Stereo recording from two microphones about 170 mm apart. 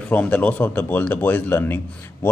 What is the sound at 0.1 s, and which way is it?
Speech, 10° left (ahead or behind).